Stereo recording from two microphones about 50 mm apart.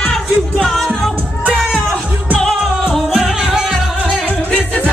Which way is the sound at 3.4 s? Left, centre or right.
Centre.